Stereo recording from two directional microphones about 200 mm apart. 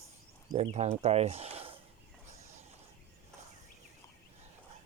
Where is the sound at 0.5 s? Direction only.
35° right (ahead or behind).